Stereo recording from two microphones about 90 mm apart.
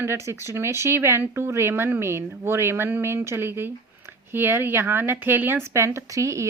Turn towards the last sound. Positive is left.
turn(degrees=-35)  # may be behind; listen again after turning